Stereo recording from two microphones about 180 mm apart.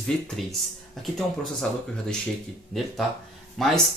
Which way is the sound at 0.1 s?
5° left (ahead or behind).